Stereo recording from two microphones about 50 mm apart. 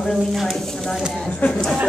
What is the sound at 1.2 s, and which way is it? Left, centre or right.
Speech, left.